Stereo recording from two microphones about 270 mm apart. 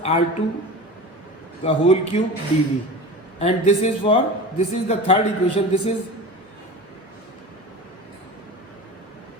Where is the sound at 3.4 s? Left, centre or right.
Left.